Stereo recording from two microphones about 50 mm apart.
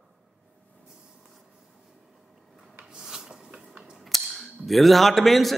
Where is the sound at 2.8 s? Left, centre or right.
Centre.